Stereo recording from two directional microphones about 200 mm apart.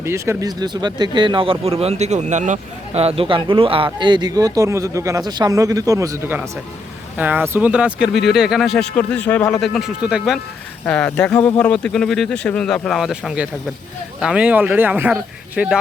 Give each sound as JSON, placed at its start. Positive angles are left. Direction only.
{"t": 0.0, "sound": "speech", "side_deg": -15}